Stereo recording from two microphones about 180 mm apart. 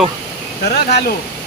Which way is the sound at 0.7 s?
65° left (ahead or behind).